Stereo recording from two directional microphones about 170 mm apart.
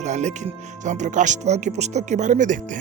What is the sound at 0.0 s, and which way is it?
Music, 45° right (ahead or behind).